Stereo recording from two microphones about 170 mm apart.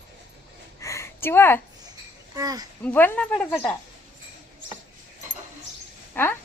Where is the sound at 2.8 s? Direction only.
10° left (ahead or behind).